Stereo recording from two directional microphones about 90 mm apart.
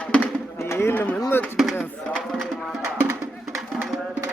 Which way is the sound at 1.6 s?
Centre (ahead or behind).